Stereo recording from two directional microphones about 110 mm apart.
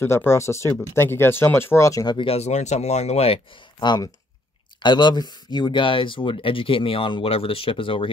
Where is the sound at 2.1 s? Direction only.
65° left (ahead or behind).